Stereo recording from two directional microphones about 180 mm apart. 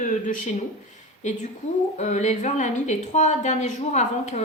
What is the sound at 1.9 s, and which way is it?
A woman's voice, 40° left (ahead or behind).